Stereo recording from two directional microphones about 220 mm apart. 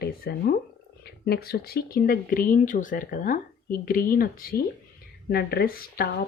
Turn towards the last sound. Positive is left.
turn(degrees=40)  # may be behind; listen again after turning